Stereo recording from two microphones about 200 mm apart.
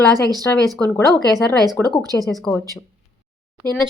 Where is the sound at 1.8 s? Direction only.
10° left (ahead or behind).